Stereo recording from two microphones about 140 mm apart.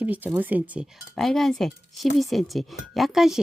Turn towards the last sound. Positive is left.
turn(degrees=0)  # may be behind; listen again after turning